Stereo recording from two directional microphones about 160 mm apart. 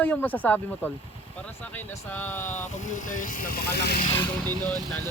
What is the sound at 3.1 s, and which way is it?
Speech, 55° left (ahead or behind).